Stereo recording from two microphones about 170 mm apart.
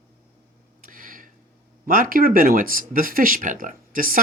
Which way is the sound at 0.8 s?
50° right (ahead or behind).